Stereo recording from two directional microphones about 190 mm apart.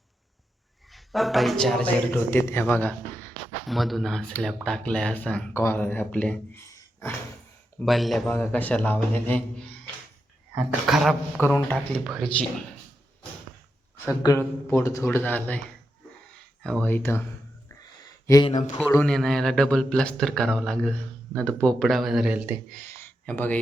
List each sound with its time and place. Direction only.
0.9 s a man's voice: centre (ahead or behind)
7.8 s a man's voice: centre (ahead or behind)
10.5 s a man's voice: centre (ahead or behind)
11.4 s a man's voice: 10° left (ahead or behind)
14.0 s speech: 20° left (ahead or behind)
16.6 s speech: 5° left (ahead or behind)
18.4 s speech: 35° left (ahead or behind)
19.0 s a man's voice: 5° left (ahead or behind)
23.0 s a sound: 10° left (ahead or behind)